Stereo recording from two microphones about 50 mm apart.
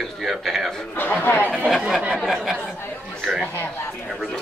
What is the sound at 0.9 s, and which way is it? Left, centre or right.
Speech, left.